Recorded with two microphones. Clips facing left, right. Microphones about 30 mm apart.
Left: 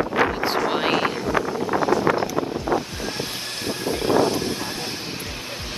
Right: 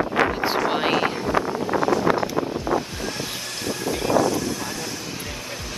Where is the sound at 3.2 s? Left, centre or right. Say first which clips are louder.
Left 1 dB; left.